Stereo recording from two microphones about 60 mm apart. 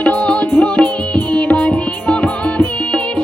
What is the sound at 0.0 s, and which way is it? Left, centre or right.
Music, centre.